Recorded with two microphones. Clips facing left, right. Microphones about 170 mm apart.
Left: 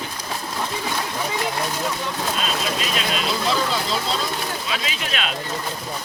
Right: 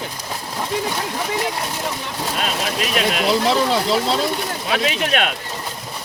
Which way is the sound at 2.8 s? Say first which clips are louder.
Right 5 dB; 60° right (ahead or behind).